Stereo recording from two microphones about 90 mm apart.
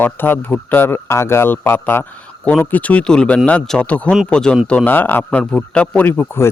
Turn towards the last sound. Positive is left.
turn(degrees=25)  # may be behind; listen again after turning